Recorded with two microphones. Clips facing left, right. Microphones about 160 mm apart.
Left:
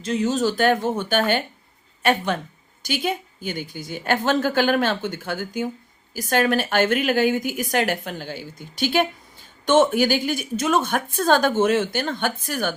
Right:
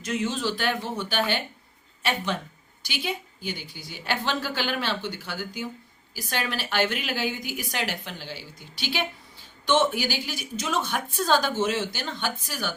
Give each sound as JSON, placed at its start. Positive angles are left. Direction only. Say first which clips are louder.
{"t": 0.0, "sound": "a woman's voice", "louder": "left 6 dB", "side_deg": 35}